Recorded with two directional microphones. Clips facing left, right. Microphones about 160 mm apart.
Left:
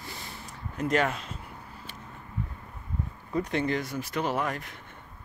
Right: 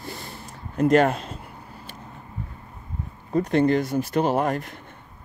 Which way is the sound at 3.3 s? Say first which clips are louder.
Right 8 dB; 40° right (ahead or behind).